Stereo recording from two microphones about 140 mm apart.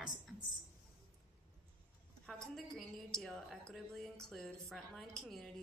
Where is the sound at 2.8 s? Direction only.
5° left (ahead or behind).